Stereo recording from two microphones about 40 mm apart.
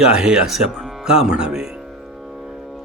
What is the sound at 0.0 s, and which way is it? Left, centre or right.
Speech, right.